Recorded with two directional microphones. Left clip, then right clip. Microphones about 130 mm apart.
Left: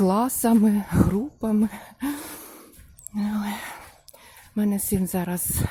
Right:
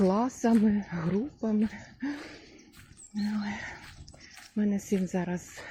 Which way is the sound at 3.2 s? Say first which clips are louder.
Left 5 dB; 30° left (ahead or behind).